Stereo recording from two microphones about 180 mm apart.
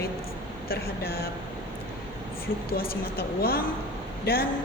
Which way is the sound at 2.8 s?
55° left (ahead or behind).